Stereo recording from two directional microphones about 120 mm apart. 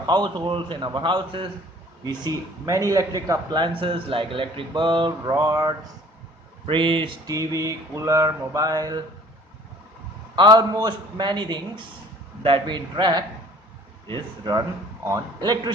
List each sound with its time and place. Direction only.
0.1 s speech: 40° right (ahead or behind)
2.0 s a sound: 30° right (ahead or behind)
3.5 s speech: 45° right (ahead or behind)
6.7 s speech: 45° right (ahead or behind)
7.3 s a sound: 30° right (ahead or behind)
10.3 s speech: 35° right (ahead or behind)